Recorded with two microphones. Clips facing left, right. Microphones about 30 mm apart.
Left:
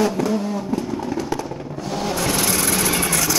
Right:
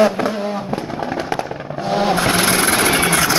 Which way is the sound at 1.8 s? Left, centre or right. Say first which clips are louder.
Right 7 dB; right.